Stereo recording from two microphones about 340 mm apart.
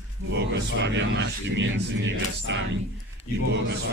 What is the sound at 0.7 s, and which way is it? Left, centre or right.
Speech, right.